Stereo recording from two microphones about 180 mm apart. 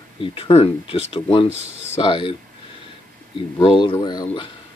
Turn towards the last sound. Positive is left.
turn(degrees=25)  # may be behind; listen again after turning